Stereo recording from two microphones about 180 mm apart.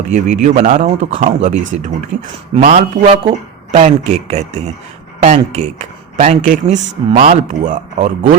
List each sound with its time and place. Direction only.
0.1 s speech: 40° right (ahead or behind)
2.6 s a man's voice: 50° right (ahead or behind)
3.1 s speech: 40° right (ahead or behind)